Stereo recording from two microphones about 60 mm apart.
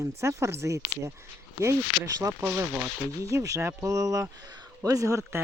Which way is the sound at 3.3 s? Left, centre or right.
Right.